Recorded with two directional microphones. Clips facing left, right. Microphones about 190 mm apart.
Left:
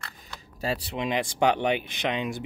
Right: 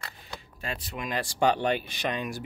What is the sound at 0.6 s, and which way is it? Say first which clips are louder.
Speech: left 7 dB; 35° left (ahead or behind).